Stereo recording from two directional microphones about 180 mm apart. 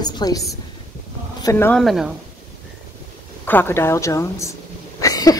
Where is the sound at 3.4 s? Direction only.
10° left (ahead or behind).